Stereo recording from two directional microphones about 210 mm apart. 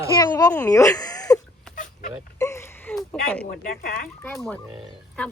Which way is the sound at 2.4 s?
15° left (ahead or behind).